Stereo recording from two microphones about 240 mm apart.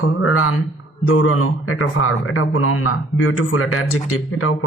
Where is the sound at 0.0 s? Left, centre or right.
Left.